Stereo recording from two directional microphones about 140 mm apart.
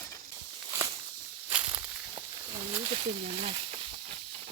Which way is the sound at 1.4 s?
10° right (ahead or behind).